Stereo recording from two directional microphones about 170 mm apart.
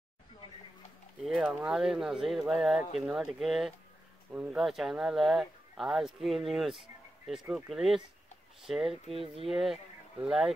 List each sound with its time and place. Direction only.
1.2 s speech: centre (ahead or behind)
9.1 s speech: 35° right (ahead or behind)
9.5 s speech: centre (ahead or behind)